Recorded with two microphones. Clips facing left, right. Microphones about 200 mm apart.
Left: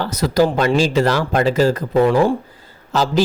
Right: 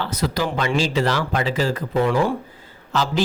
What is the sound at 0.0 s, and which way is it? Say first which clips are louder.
Speech: left 7 dB; 40° left (ahead or behind).